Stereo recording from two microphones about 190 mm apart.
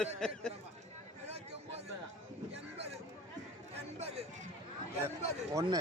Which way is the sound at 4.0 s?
35° right (ahead or behind).